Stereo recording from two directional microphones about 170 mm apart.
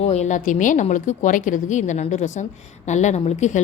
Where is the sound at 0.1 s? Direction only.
45° left (ahead or behind).